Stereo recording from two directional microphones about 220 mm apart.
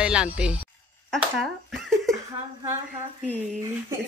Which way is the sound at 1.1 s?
Centre (ahead or behind).